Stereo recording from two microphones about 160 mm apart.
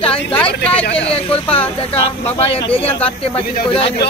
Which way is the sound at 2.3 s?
35° left (ahead or behind).